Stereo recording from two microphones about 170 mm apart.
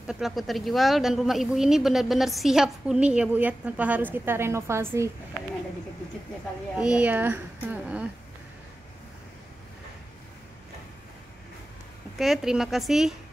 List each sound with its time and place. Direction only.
0.0 s speech: 5° right (ahead or behind)
6.8 s a woman's voice: 5° right (ahead or behind)
12.2 s speech: centre (ahead or behind)